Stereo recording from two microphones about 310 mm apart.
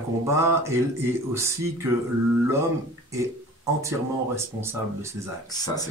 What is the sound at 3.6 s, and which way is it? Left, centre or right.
Speech, centre.